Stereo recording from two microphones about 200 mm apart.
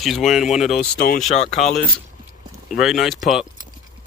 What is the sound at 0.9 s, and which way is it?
Speech, 45° left (ahead or behind).